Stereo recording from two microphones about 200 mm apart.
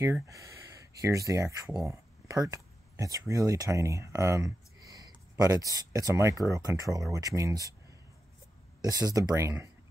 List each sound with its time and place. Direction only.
0.0 s speech: 15° right (ahead or behind)
8.8 s speech: 20° right (ahead or behind)